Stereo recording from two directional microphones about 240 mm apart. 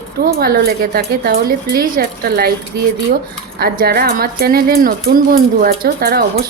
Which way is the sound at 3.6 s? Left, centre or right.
Right.